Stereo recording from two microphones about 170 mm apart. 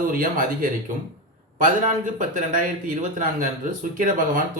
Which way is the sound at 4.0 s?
50° right (ahead or behind).